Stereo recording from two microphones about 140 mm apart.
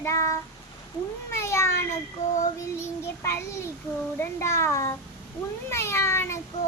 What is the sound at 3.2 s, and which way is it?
A child's voice, 20° left (ahead or behind).